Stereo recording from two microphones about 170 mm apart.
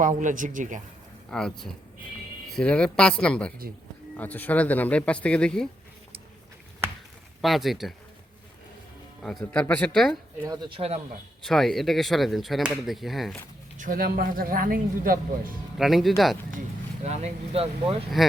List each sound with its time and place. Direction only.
0.0 s speech: 50° right (ahead or behind)
1.3 s speech: 5° left (ahead or behind)
6.8 s chop: 15° right (ahead or behind)
7.4 s speech: centre (ahead or behind)
9.4 s speech: 10° left (ahead or behind)
10.4 s speech: 25° right (ahead or behind)
11.4 s speech: centre (ahead or behind)
13.7 s speech: 55° right (ahead or behind)
15.8 s speech: centre (ahead or behind)
16.5 s speech: 45° right (ahead or behind)
18.2 s speech: centre (ahead or behind)